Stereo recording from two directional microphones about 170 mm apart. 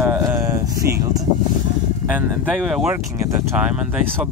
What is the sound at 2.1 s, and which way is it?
Speech, 10° right (ahead or behind).